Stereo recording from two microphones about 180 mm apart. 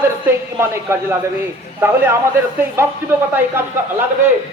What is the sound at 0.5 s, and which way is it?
A man's voice, 15° right (ahead or behind).